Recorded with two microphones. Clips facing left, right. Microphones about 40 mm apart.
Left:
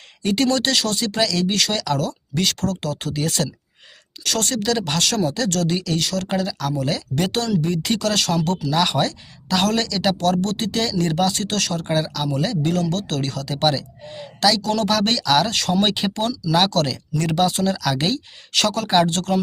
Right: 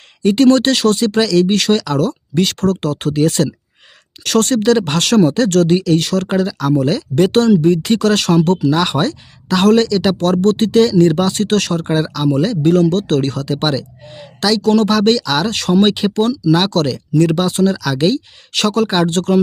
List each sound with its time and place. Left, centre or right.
0.2 s speech: centre
0.4 s speech: right
1.5 s speech: centre
4.2 s speech: right
4.9 s speech: right; by 7.3 s centre
7.3 s speech: right
7.7 s speech: centre
10.2 s speech: right
10.8 s speech: centre
11.9 s speech: centre
13.5 s speech: centre